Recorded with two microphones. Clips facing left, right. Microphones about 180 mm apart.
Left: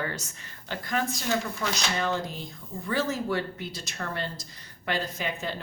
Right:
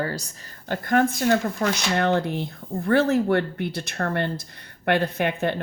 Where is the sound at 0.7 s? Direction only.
55° right (ahead or behind).